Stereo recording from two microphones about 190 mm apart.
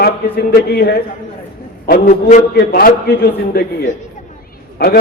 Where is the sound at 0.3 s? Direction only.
55° left (ahead or behind).